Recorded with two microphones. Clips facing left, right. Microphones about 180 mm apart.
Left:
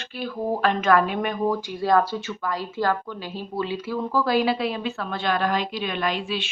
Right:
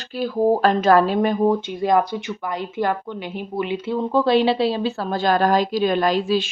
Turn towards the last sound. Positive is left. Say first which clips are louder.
# right 7 dB
turn(degrees=-40)  # may be behind; listen again after turning